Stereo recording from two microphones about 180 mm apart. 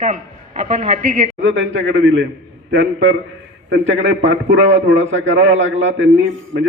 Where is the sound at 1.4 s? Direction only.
90° right.